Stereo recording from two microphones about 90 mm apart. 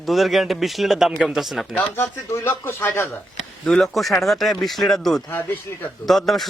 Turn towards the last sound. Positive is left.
turn(degrees=0)  # may be behind; listen again after turning